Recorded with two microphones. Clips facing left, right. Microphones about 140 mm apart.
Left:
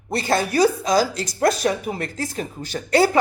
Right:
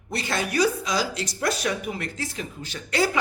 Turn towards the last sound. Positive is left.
turn(degrees=40)  # may be behind; listen again after turning